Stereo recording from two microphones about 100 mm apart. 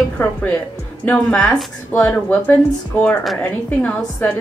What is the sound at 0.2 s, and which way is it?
Speech, 15° left (ahead or behind).